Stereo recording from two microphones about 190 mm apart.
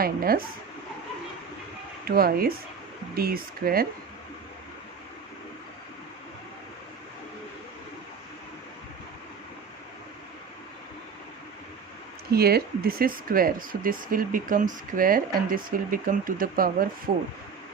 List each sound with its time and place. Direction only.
0.0 s speech: 50° right (ahead or behind)
2.0 s speech: 50° right (ahead or behind)
12.3 s speech: 55° right (ahead or behind)